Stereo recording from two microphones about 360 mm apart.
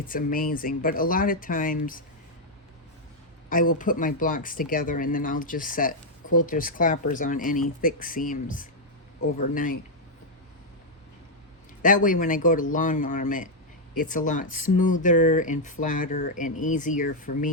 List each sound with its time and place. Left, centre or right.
0.1 s speech: left
3.5 s speech: left
11.8 s speech: left